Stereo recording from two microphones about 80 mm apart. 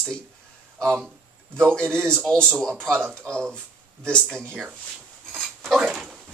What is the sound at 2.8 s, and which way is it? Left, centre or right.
Speech, right.